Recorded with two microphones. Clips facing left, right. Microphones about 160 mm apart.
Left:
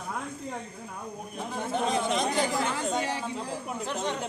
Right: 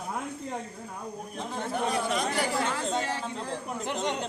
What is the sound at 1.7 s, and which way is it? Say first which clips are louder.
Speech: left 2 dB; 20° left (ahead or behind).